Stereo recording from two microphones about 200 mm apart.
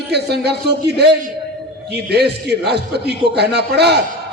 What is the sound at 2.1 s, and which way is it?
A man's voice, 55° right (ahead or behind).